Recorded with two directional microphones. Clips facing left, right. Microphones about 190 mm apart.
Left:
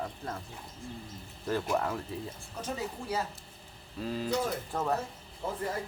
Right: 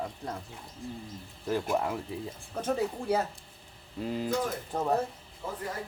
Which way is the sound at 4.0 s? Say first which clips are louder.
Right 1 dB; 20° right (ahead or behind).